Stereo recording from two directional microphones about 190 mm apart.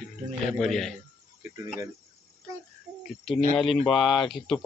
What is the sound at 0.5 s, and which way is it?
Speech, centre (ahead or behind).